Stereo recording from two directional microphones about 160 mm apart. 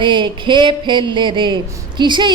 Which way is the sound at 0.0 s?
30° right (ahead or behind).